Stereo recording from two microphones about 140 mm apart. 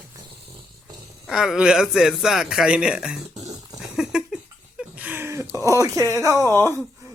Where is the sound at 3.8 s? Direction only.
5° right (ahead or behind); by 5.5 s 20° right (ahead or behind).